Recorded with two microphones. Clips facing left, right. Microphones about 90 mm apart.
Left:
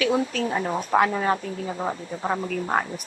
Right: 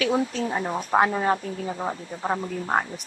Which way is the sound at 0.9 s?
25° right (ahead or behind).